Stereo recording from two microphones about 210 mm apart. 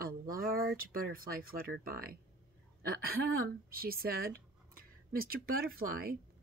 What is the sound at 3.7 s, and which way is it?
Speech, 45° right (ahead or behind).